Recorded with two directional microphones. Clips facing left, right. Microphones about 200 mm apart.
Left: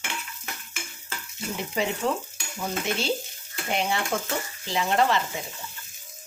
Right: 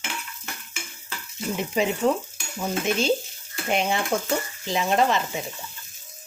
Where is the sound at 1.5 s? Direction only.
20° right (ahead or behind).